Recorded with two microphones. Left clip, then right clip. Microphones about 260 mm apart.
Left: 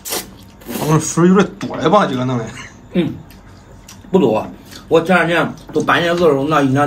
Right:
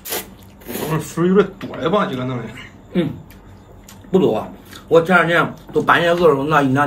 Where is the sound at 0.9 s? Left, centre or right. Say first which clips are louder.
Left 2 dB; left.